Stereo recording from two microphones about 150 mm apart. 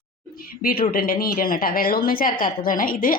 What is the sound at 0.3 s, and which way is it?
A woman's voice, 75° left (ahead or behind).